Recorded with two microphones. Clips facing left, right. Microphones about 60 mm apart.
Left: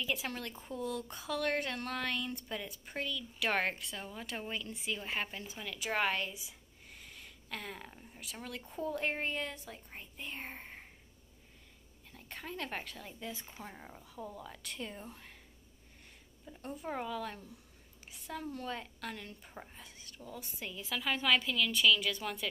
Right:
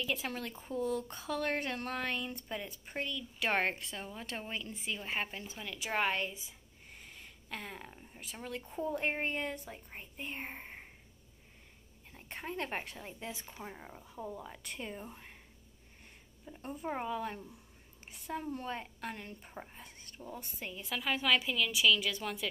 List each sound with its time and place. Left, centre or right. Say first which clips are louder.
0.0 s a woman's voice: right 1 dB; centre
6.9 s a sound: even; centre
8.4 s a woman's voice: right 2 dB; centre
12.2 s speech: right 3 dB; right
13.5 s a woman's voice: right 2 dB; centre
16.4 s speech: right 2 dB; centre
16.9 s a woman's voice: right 2 dB; right; by 22.5 s centre